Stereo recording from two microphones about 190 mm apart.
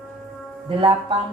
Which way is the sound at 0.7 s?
30° right (ahead or behind).